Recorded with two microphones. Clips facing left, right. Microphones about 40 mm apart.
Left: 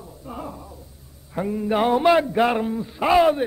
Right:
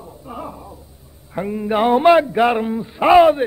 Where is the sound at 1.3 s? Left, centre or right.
Centre.